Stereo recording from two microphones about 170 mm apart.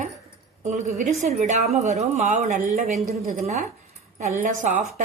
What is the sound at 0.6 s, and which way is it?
A woman's voice, 40° right (ahead or behind).